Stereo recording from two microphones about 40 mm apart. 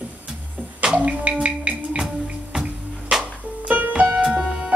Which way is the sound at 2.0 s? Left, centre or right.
Centre.